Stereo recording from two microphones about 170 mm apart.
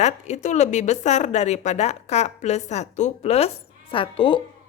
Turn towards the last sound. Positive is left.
turn(degrees=30)  # may be behind; listen again after turning